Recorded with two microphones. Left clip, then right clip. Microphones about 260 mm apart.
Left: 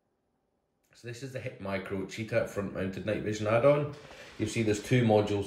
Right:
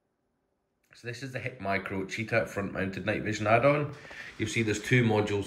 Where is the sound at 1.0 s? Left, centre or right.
Centre.